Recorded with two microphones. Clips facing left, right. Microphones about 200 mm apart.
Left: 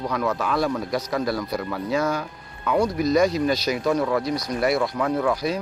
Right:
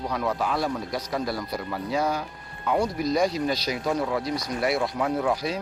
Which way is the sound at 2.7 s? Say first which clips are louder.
Left 3 dB; 75° left (ahead or behind).